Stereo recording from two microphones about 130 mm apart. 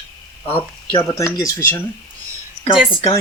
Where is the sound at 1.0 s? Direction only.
25° left (ahead or behind).